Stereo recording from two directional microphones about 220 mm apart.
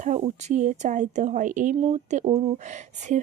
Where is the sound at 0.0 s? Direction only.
30° right (ahead or behind).